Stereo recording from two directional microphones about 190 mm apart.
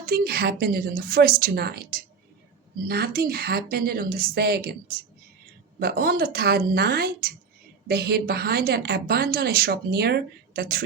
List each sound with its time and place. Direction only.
0.0 s a woman's voice: 50° right (ahead or behind)